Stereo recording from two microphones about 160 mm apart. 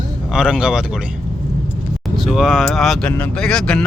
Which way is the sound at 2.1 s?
Centre (ahead or behind).